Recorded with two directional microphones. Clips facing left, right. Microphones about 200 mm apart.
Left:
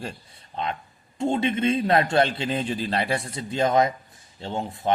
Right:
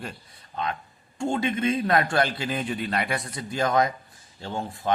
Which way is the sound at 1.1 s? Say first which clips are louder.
Left 2 dB; 25° left (ahead or behind).